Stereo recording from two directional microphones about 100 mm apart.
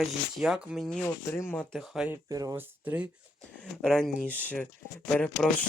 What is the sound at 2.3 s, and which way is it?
Speech, 35° right (ahead or behind).